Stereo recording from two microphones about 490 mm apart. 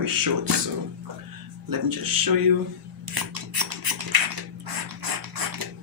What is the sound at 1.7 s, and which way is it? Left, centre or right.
Speech, right.